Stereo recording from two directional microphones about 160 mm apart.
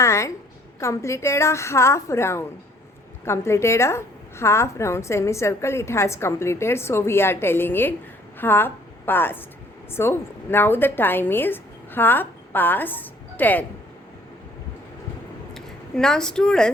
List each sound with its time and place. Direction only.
0.0 s a sound: 20° left (ahead or behind)
0.8 s a woman's voice: 20° left (ahead or behind)
15.5 s speech: 5° left (ahead or behind)